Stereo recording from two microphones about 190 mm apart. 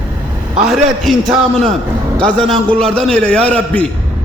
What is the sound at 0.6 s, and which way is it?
Speech, centre (ahead or behind).